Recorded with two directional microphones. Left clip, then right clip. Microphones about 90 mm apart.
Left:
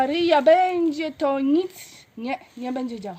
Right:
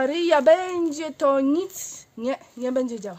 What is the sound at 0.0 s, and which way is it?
A woman's voice, 25° right (ahead or behind).